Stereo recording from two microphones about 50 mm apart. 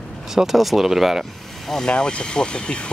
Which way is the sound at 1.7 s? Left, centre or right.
Centre.